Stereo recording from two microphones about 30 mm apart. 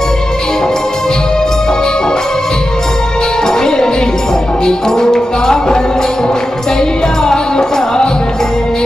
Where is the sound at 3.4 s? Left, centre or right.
Centre.